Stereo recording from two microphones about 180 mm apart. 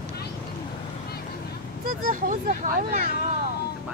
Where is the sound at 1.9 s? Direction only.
55° right (ahead or behind).